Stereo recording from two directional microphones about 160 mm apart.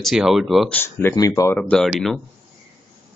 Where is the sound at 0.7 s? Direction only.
15° left (ahead or behind).